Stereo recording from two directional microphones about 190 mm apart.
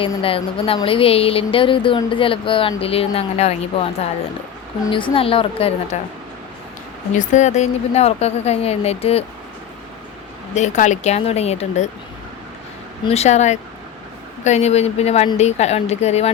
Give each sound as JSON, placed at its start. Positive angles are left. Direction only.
{"t": 0.0, "sound": "speech", "side_deg": 30}
{"t": 7.2, "sound": "speech", "side_deg": 40}
{"t": 10.5, "sound": "speech", "side_deg": 40}
{"t": 13.1, "sound": "speech", "side_deg": 35}